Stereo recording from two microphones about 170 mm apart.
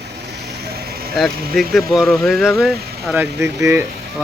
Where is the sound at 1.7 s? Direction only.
Centre (ahead or behind).